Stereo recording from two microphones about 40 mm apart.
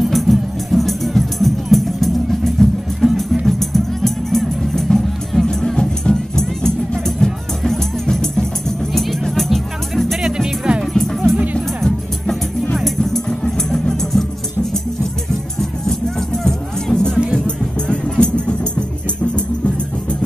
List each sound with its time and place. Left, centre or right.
0.0 s music: centre
13.5 s music: centre
15.9 s music: centre; by 20.2 s left